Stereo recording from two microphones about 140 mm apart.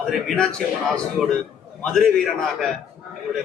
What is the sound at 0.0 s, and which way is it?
A man's voice, 5° left (ahead or behind).